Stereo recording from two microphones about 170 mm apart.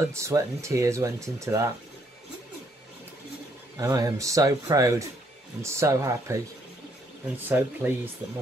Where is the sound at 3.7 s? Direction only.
20° right (ahead or behind).